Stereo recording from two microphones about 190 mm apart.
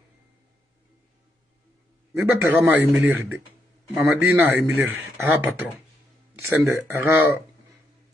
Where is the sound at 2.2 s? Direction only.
10° right (ahead or behind).